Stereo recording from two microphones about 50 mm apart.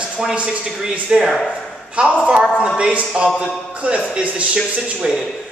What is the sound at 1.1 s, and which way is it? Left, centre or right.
Speech, centre.